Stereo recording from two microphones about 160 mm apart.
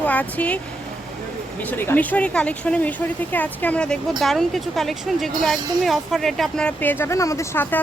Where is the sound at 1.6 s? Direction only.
10° left (ahead or behind).